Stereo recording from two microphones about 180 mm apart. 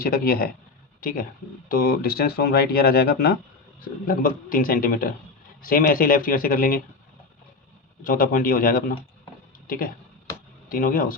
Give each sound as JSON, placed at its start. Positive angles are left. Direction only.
{"t": 0.0, "sound": "speech", "side_deg": 55}
{"t": 8.0, "sound": "speech", "side_deg": 50}